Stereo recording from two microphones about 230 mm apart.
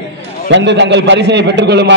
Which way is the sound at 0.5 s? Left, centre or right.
Right.